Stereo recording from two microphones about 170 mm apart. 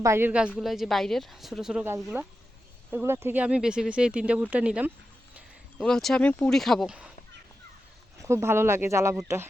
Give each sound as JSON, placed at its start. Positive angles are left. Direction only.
{"t": 0.0, "sound": "a woman's voice", "side_deg": -15}
{"t": 5.7, "sound": "a woman's voice", "side_deg": 5}
{"t": 8.2, "sound": "speech", "side_deg": -15}